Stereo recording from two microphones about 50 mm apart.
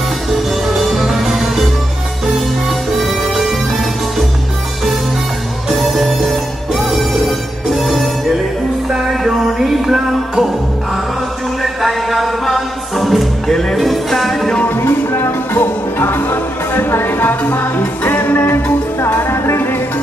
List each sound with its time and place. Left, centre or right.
0.3 s music: centre
3.0 s music: centre
5.7 s music: centre
9.1 s music: centre
11.8 s music: centre
14.8 s music: left